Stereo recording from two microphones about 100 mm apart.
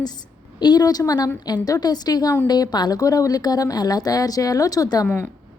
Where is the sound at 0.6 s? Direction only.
45° left (ahead or behind).